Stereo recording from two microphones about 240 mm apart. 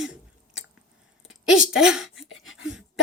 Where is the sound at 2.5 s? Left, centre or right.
Left.